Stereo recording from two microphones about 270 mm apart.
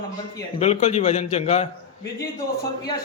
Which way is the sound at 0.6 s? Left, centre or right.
Left.